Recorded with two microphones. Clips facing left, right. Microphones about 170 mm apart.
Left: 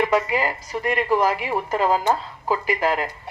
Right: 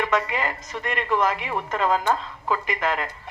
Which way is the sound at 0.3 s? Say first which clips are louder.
Left 4 dB; 35° left (ahead or behind).